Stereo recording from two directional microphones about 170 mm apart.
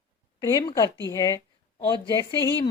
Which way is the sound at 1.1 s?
20° left (ahead or behind).